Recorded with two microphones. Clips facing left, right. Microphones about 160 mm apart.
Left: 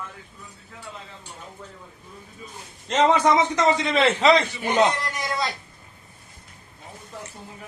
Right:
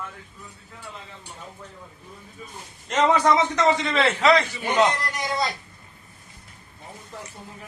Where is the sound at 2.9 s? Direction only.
25° left (ahead or behind).